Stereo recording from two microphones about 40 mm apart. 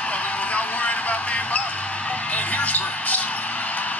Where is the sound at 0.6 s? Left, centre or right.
Left.